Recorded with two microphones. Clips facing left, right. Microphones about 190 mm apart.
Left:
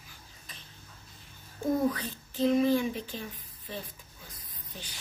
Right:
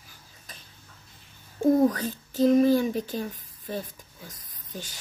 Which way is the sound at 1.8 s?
40° right (ahead or behind).